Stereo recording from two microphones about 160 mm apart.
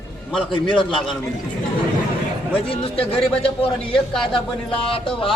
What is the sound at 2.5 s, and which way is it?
A man's voice, 35° left (ahead or behind).